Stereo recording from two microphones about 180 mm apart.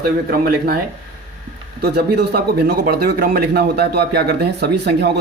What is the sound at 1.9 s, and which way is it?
A man's voice, 65° right (ahead or behind).